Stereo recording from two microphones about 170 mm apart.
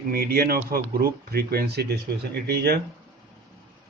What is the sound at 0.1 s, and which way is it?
Speech, 65° right (ahead or behind).